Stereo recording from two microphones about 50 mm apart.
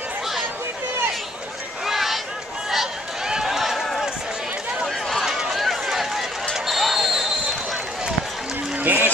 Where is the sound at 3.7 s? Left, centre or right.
Centre.